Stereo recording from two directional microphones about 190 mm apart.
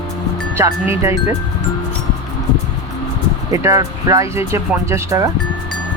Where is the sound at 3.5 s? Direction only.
15° right (ahead or behind).